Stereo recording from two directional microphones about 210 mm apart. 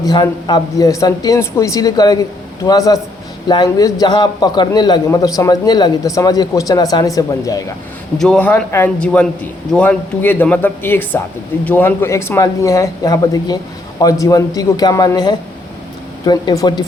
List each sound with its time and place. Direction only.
0.0 s a man's voice: 20° left (ahead or behind)
8.2 s a man's voice: 5° left (ahead or behind); by 16.8 s 20° left (ahead or behind)